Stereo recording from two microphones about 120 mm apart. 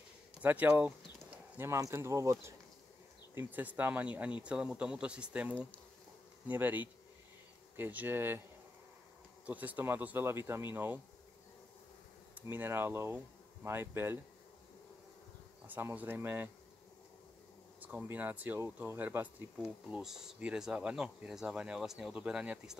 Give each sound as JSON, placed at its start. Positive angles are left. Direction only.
{"t": 0.4, "sound": "speech", "side_deg": -15}
{"t": 1.6, "sound": "speech", "side_deg": -25}
{"t": 3.3, "sound": "speech", "side_deg": -15}
{"t": 9.5, "sound": "speech", "side_deg": -15}
{"t": 12.4, "sound": "speech", "side_deg": -15}
{"t": 15.6, "sound": "speech", "side_deg": -15}
{"t": 17.7, "sound": "speech", "side_deg": -15}
{"t": 19.6, "sound": "speech", "side_deg": -5}